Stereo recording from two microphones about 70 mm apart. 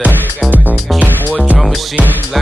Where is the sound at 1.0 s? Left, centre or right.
Left.